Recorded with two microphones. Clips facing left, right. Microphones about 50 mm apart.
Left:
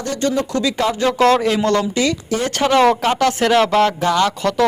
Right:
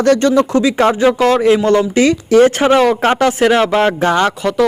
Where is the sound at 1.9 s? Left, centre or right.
Right.